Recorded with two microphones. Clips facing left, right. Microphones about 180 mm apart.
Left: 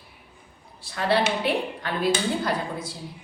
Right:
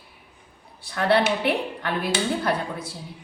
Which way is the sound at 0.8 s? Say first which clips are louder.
Right 2 dB; 60° right (ahead or behind).